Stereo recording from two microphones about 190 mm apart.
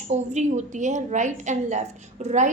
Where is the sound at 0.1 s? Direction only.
40° right (ahead or behind).